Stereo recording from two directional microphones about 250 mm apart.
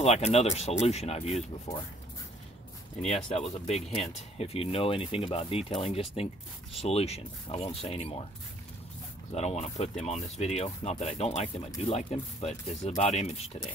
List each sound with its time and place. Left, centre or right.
0.0 s speech: left
3.3 s speech: left
9.3 s speech: left